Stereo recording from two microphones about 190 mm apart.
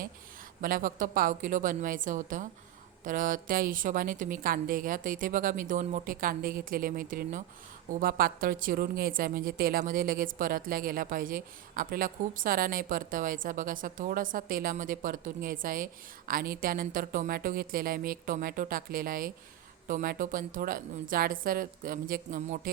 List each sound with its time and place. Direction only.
0.6 s a woman's voice: 45° right (ahead or behind)